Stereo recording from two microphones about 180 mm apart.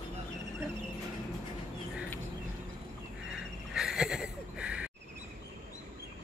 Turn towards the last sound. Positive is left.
turn(degrees=-5)  # may be behind; listen again after turning